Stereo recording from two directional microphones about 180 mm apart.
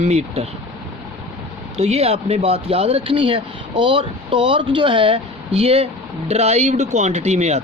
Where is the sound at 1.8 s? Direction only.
35° right (ahead or behind).